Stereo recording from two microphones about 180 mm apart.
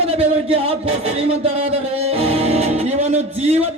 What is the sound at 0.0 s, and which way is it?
Speech, 30° right (ahead or behind).